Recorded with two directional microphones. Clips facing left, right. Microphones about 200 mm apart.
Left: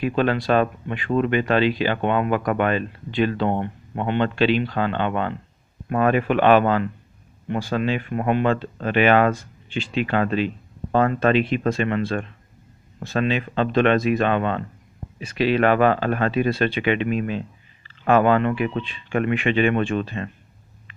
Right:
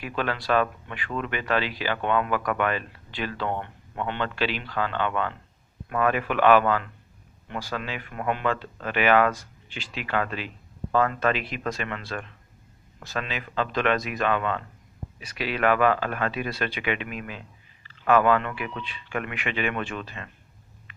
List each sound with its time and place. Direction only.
0.0 s speech: 25° left (ahead or behind)